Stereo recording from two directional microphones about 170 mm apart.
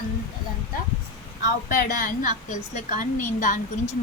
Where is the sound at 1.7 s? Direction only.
55° left (ahead or behind).